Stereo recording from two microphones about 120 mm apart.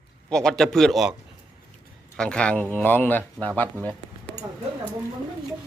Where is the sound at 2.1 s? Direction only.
5° left (ahead or behind).